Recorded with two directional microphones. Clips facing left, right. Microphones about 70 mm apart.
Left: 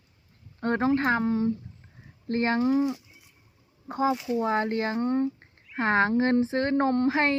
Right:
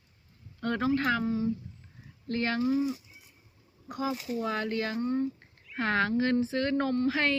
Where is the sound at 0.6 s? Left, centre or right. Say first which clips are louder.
Left 4 dB; left.